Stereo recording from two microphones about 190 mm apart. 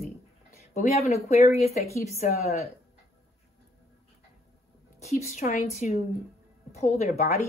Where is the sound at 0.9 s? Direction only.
35° left (ahead or behind).